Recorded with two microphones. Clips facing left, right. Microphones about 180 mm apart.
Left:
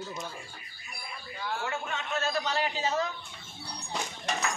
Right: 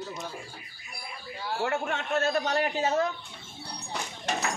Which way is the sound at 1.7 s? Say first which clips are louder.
Right 5 dB; 60° right (ahead or behind).